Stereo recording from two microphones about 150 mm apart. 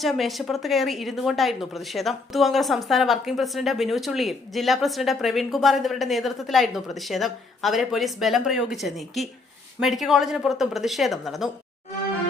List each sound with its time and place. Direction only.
0.0 s a woman's voice: centre (ahead or behind)